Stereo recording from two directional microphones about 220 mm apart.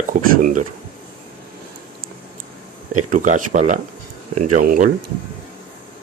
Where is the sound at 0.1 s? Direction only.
40° right (ahead or behind).